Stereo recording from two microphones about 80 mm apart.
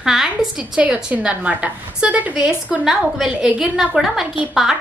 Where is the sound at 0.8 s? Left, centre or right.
Centre.